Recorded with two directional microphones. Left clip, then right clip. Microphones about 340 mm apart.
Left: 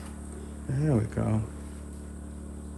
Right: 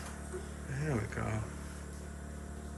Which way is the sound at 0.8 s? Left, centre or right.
Centre.